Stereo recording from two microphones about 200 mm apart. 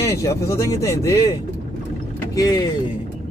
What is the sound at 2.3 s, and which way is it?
Speech, 20° left (ahead or behind).